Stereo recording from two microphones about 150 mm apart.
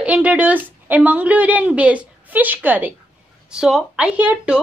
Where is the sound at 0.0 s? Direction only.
10° right (ahead or behind).